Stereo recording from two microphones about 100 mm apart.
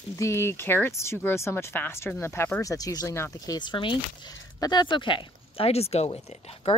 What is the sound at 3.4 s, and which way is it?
Speech, 45° left (ahead or behind).